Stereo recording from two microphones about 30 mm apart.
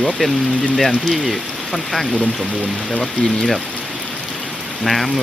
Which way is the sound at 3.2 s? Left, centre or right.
Left.